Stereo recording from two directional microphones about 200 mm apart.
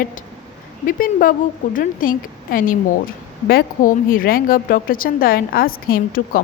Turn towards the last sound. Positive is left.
turn(degrees=45)  # may be behind; listen again after turning